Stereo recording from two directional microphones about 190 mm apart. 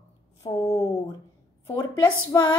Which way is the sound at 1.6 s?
15° left (ahead or behind).